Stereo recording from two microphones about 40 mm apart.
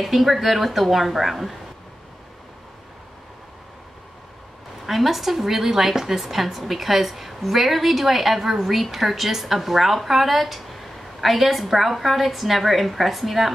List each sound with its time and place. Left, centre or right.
0.0 s a woman's voice: centre
4.8 s a woman's voice: centre